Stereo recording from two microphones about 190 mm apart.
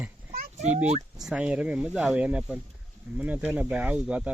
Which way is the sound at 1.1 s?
5° right (ahead or behind).